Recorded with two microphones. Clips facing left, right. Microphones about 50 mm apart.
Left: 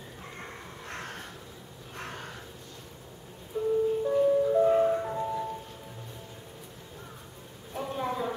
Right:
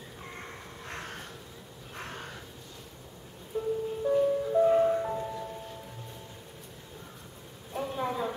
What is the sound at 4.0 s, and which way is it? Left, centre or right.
Music, centre.